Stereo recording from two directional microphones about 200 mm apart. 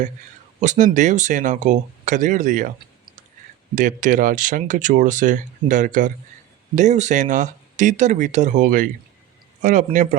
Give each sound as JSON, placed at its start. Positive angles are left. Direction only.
{"t": 0.6, "sound": "speech", "side_deg": -35}
{"t": 3.8, "sound": "speech", "side_deg": -40}